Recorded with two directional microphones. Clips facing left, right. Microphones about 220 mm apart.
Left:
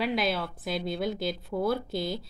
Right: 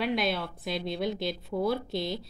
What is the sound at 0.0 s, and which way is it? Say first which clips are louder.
Speech: even; centre (ahead or behind).